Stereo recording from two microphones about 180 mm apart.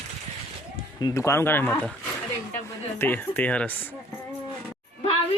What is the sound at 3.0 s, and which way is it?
Speech, 10° left (ahead or behind).